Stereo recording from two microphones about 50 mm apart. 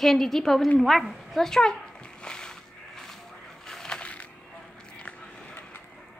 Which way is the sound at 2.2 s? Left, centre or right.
Centre.